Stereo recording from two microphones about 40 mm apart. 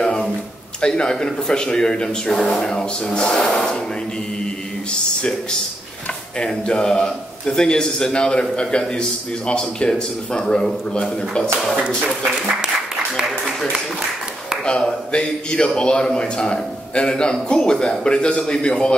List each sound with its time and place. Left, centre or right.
0.0 s a sound: centre
0.7 s speech: left
4.9 s speech: left
12.3 s speech: centre
14.6 s speech: centre